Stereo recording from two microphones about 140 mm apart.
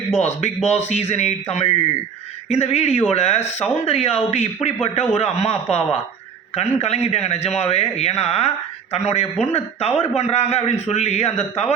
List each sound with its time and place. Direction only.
0.2 s speech: 50° left (ahead or behind)
6.6 s speech: 50° left (ahead or behind)